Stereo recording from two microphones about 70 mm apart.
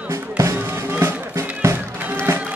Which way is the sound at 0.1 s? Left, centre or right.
Right.